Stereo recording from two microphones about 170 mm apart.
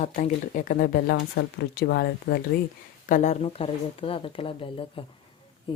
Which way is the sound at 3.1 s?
45° left (ahead or behind).